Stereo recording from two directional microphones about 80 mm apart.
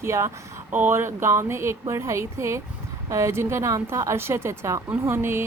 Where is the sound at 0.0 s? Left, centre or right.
Right.